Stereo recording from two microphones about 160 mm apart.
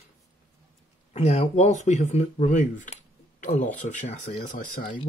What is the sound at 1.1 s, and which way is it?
Speech, 45° left (ahead or behind).